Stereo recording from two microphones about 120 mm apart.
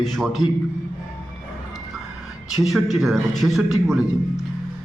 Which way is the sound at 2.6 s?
Centre (ahead or behind).